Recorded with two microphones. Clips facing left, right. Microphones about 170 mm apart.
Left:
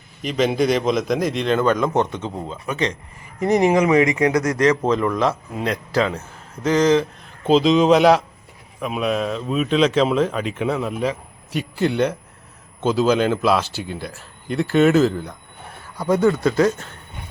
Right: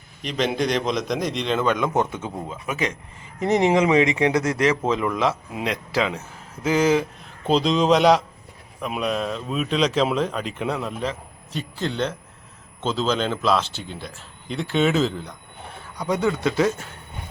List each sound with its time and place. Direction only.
0.2 s speech: 5° left (ahead or behind)
3.4 s speech: 20° right (ahead or behind)
4.7 s a man's voice: 5° right (ahead or behind)